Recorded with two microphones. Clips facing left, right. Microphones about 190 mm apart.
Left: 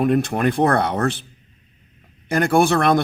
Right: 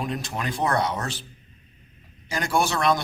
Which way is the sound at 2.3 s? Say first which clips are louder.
Left 8 dB; 55° left (ahead or behind).